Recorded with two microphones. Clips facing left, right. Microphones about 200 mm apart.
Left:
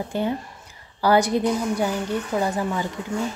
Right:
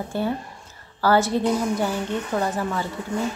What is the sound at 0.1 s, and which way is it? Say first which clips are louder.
Speech: even; 15° left (ahead or behind).